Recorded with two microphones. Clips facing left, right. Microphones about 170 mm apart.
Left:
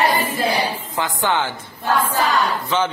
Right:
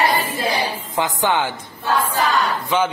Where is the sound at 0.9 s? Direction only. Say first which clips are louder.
Right 2 dB; 15° right (ahead or behind).